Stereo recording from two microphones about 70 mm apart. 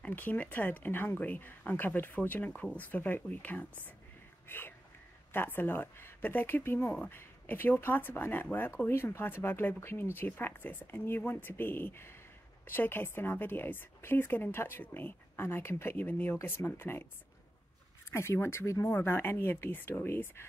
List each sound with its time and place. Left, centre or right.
0.0 s speech: left
4.5 s a sound: left
5.3 s a woman's voice: left
18.1 s a woman's voice: left